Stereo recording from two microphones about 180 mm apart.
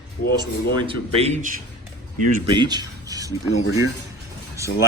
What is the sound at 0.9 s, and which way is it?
Speech, 35° right (ahead or behind).